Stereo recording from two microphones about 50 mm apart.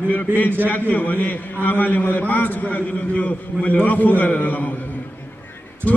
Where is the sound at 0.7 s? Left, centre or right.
Left.